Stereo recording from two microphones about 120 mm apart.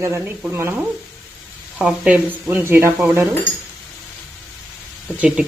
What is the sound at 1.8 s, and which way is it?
Speech, 10° right (ahead or behind).